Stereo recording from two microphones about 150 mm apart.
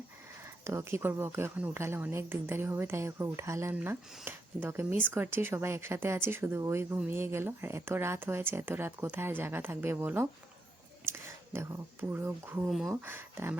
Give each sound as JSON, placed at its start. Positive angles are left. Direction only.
{"t": 0.6, "sound": "speech", "side_deg": -20}
{"t": 12.6, "sound": "speech", "side_deg": 0}
{"t": 12.9, "sound": "speech", "side_deg": -15}